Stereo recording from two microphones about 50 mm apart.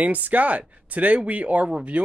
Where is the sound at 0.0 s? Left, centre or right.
Right.